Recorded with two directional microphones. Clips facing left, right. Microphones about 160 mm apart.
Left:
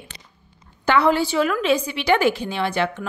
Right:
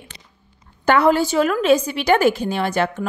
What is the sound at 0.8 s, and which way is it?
A woman's voice, 45° right (ahead or behind).